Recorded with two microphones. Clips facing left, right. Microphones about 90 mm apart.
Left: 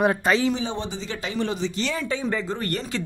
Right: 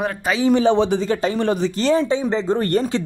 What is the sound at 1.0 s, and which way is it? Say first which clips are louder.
Speech: right 8 dB; 40° right (ahead or behind).